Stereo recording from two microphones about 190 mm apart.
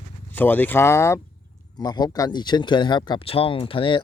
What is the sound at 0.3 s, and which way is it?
A man's voice, 10° left (ahead or behind).